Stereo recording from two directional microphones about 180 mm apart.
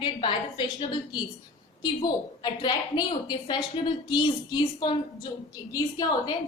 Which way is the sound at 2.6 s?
25° left (ahead or behind).